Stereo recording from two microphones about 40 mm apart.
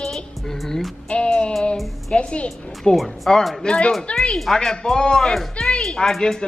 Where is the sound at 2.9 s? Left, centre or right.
Centre.